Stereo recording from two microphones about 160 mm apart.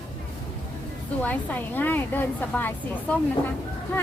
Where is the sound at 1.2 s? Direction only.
10° left (ahead or behind).